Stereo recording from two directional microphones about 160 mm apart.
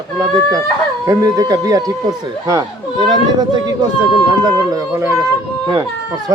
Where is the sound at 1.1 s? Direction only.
20° right (ahead or behind).